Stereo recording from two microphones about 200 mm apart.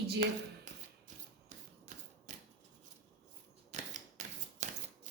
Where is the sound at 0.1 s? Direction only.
45° right (ahead or behind).